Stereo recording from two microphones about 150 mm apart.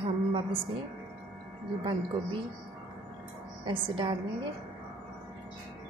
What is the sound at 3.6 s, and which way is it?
Speech, 35° right (ahead or behind).